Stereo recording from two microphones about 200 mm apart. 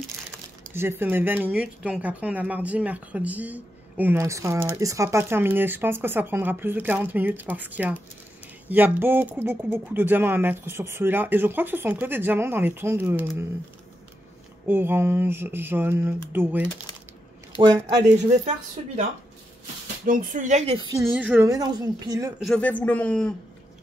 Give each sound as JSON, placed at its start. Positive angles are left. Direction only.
{"t": 0.7, "sound": "speech", "side_deg": -10}
{"t": 14.7, "sound": "speech", "side_deg": -10}
{"t": 17.6, "sound": "speech", "side_deg": -20}
{"t": 20.1, "sound": "speech", "side_deg": -40}
{"t": 21.0, "sound": "speech", "side_deg": -5}
{"t": 22.4, "sound": "speech", "side_deg": 5}